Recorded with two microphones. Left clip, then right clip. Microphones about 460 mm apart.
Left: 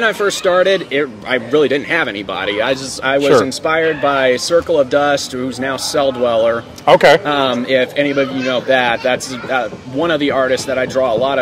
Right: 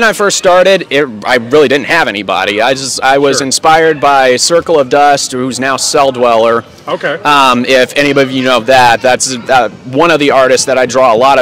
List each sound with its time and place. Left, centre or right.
0.0 s a man's voice: right
6.9 s a man's voice: left
7.5 s a man's voice: right